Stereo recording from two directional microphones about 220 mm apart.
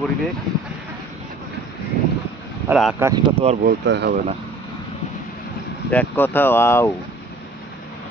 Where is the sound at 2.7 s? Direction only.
5° right (ahead or behind).